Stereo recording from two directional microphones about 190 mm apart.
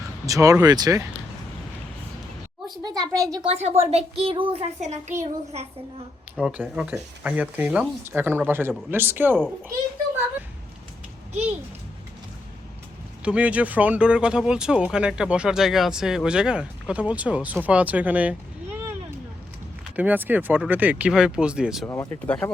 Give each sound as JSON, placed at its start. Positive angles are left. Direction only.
{"t": 0.3, "sound": "speech", "side_deg": -15}
{"t": 2.8, "sound": "a child's voice", "side_deg": -20}
{"t": 3.5, "sound": "a child's voice", "side_deg": -35}
{"t": 6.3, "sound": "speech", "side_deg": -5}
{"t": 13.2, "sound": "speech", "side_deg": -5}
{"t": 20.0, "sound": "speech", "side_deg": -10}
{"t": 21.8, "sound": "speech", "side_deg": 15}